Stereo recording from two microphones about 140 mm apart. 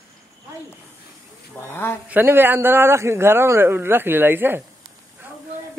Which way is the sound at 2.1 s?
15° right (ahead or behind).